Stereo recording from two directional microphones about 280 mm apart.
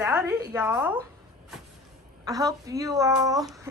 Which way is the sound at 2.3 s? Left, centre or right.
Centre.